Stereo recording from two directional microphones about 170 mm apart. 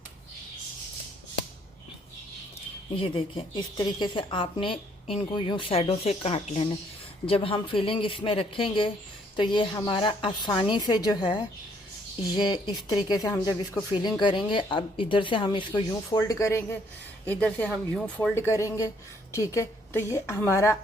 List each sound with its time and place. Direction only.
2.9 s speech: 30° left (ahead or behind); by 20.7 s 15° left (ahead or behind)